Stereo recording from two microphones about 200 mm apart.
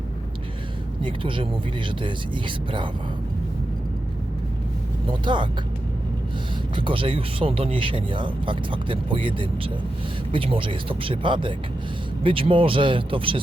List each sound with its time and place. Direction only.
1.0 s speech: 25° right (ahead or behind)
5.0 s speech: 25° right (ahead or behind)
6.7 s speech: 25° right (ahead or behind)